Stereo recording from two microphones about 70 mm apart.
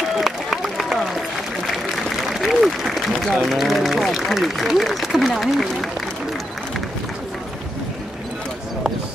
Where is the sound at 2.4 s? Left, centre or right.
Centre.